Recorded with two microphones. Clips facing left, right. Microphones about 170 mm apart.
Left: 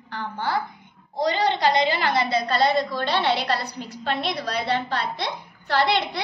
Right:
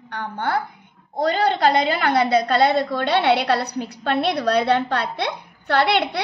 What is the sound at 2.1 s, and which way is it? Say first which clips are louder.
A woman's voice: right 5 dB; 60° right (ahead or behind).